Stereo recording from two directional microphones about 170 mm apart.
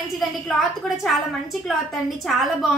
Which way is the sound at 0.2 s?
Centre (ahead or behind).